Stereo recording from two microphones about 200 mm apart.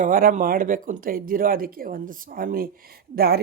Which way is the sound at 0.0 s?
45° right (ahead or behind).